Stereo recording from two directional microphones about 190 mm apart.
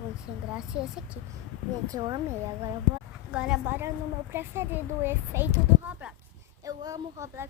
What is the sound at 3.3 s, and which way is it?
A child's voice, 5° right (ahead or behind).